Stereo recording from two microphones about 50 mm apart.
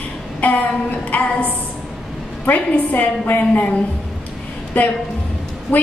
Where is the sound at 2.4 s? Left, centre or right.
Left.